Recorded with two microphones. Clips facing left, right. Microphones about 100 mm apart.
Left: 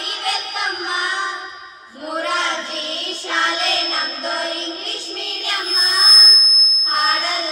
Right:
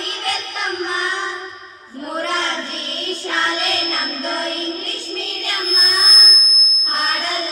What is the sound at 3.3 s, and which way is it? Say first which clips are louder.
Music: left 1 dB; 15° left (ahead or behind).